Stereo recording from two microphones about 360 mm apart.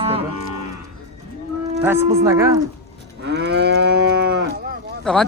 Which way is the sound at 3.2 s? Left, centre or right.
Right.